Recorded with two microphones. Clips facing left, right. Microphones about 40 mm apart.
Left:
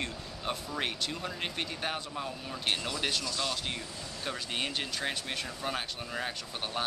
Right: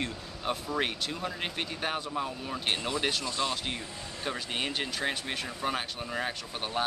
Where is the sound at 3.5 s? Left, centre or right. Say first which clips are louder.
Right 2 dB; centre.